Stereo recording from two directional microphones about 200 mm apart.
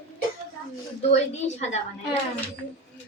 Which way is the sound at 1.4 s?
35° left (ahead or behind).